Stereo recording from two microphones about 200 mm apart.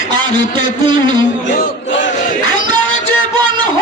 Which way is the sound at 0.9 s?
25° right (ahead or behind).